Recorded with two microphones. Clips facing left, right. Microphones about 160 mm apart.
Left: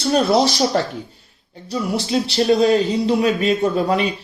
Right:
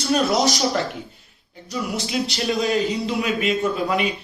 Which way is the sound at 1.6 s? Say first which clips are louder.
Left 4 dB; 30° left (ahead or behind).